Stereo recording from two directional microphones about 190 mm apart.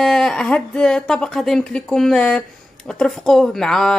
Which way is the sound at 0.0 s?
Centre (ahead or behind).